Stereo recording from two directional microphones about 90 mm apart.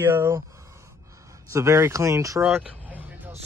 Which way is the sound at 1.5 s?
30° right (ahead or behind).